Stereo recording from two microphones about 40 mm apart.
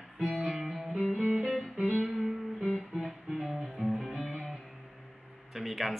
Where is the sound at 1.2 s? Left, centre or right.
Right.